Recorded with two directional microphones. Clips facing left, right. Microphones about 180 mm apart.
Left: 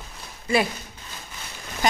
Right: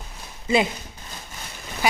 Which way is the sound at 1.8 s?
10° right (ahead or behind).